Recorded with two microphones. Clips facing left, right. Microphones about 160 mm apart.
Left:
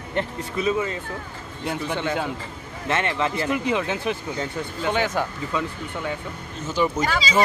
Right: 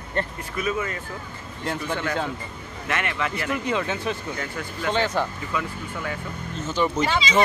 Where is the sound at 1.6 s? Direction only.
10° left (ahead or behind).